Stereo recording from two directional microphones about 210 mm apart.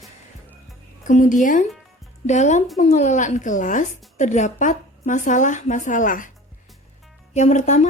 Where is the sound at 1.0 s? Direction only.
35° left (ahead or behind).